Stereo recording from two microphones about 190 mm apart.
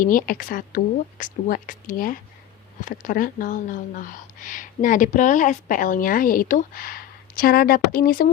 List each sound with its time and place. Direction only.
0.0 s speech: 45° left (ahead or behind)